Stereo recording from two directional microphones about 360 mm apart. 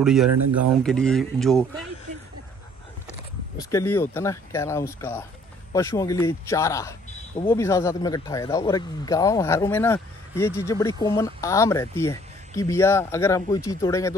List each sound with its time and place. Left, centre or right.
0.0 s speech: centre
0.3 s speech: right
0.8 s speech: centre
3.5 s speech: centre